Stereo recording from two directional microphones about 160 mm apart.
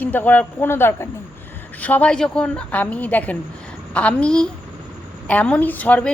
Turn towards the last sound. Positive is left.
turn(degrees=10)  # may be behind; listen again after turning